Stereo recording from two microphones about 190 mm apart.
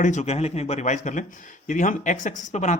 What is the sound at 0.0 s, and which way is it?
Speech, 40° left (ahead or behind).